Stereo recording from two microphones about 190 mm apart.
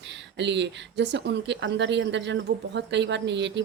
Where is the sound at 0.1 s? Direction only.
65° right (ahead or behind).